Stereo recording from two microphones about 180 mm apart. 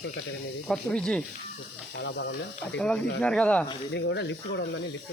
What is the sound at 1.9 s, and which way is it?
Speech, 70° left (ahead or behind).